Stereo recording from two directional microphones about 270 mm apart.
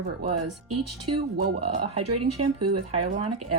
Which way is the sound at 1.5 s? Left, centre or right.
Right.